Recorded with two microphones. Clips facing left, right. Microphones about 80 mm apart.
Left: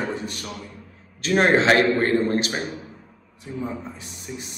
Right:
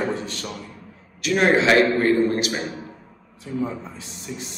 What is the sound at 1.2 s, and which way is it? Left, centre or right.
A man's voice, left.